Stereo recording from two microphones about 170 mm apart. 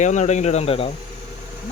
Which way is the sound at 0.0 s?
45° left (ahead or behind).